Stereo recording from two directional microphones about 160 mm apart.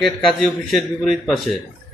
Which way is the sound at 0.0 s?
Centre (ahead or behind).